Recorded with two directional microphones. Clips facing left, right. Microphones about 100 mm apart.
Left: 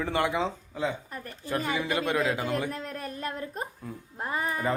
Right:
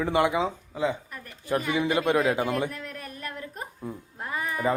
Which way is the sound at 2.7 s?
30° left (ahead or behind).